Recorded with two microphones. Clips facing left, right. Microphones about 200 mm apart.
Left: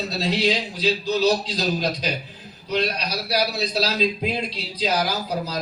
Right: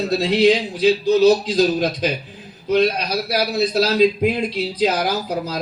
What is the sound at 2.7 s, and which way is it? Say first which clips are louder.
A man's voice: right 7 dB; 50° right (ahead or behind).